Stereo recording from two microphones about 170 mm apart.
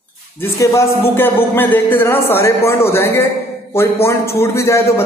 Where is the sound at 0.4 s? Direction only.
15° left (ahead or behind).